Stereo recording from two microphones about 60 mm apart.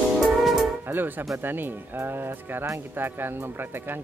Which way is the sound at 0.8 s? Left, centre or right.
Right.